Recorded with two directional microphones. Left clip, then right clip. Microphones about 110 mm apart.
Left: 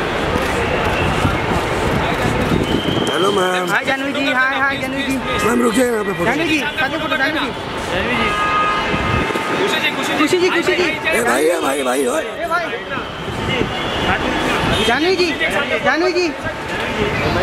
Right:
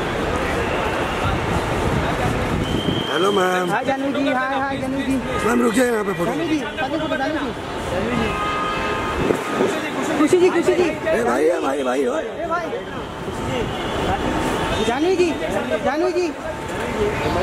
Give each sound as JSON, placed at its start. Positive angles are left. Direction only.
{"t": 3.2, "sound": "speech", "side_deg": 5}
{"t": 5.5, "sound": "speech", "side_deg": 0}
{"t": 10.2, "sound": "speech", "side_deg": 35}
{"t": 11.3, "sound": "speech", "side_deg": 10}